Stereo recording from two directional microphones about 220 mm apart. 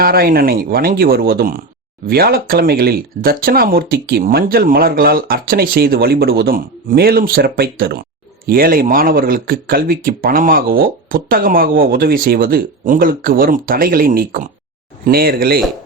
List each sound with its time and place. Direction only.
0.0 s speech: 40° right (ahead or behind)